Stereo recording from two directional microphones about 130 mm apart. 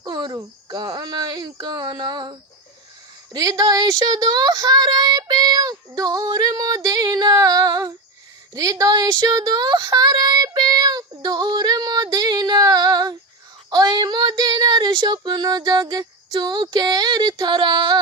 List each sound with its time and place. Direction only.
0.0 s speech: 35° right (ahead or behind)
8.5 s a sound: 25° right (ahead or behind)
13.7 s female singing: 35° right (ahead or behind)